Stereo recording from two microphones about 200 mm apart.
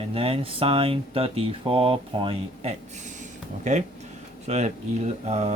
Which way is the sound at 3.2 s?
35° right (ahead or behind).